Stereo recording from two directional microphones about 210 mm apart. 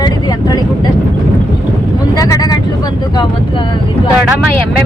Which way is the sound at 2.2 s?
15° left (ahead or behind).